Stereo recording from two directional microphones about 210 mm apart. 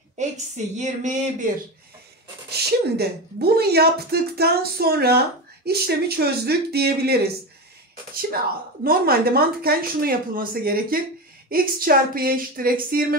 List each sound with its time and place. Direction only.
0.2 s a sound: 35° right (ahead or behind)
0.7 s speech: 35° right (ahead or behind)
2.5 s speech: 50° right (ahead or behind)
8.8 s speech: 45° right (ahead or behind)